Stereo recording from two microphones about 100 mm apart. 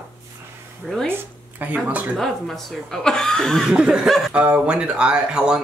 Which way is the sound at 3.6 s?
5° right (ahead or behind).